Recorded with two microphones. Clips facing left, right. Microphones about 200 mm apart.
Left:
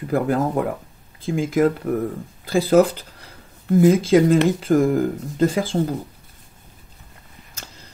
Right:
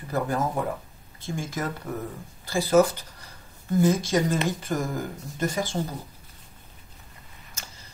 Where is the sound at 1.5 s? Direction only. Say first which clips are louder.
Left 16 dB; 55° left (ahead or behind).